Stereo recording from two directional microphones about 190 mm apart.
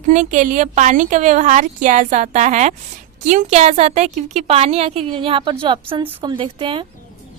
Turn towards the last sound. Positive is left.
turn(degrees=-25)  # may be behind; listen again after turning